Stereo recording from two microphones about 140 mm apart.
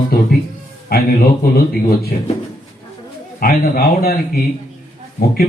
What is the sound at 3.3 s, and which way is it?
A man's voice, 90° left.